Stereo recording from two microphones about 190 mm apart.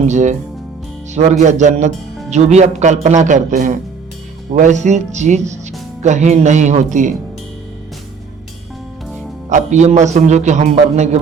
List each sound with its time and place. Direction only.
0.0 s a man's voice: 40° right (ahead or behind)
9.5 s a man's voice: 40° right (ahead or behind)